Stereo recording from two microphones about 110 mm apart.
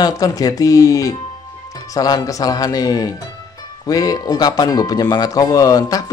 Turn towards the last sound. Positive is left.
turn(degrees=35)  # may be behind; listen again after turning